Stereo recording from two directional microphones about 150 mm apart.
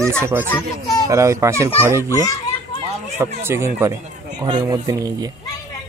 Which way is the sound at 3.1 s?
15° right (ahead or behind).